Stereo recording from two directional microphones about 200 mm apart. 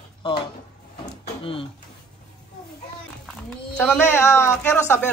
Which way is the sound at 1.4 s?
25° left (ahead or behind).